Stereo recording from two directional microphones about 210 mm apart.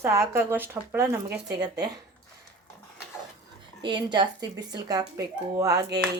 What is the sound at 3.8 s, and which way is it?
Speech, 20° right (ahead or behind).